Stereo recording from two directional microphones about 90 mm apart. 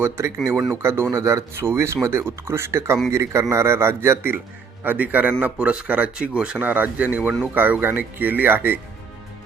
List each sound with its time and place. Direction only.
0.7 s speech: 30° right (ahead or behind)